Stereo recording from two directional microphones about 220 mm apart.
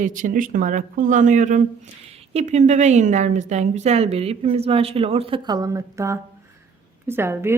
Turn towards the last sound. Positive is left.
turn(degrees=-10)  # may be behind; listen again after turning